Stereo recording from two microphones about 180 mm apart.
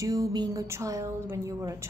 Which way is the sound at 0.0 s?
20° right (ahead or behind).